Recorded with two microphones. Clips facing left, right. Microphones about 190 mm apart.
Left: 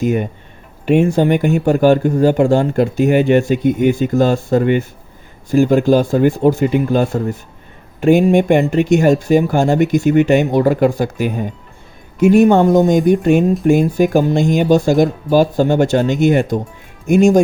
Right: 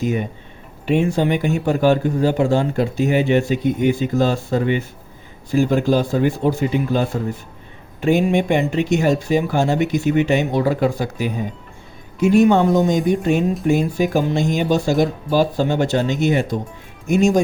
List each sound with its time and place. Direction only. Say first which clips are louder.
0.0 s speech: left 5 dB; 50° left (ahead or behind)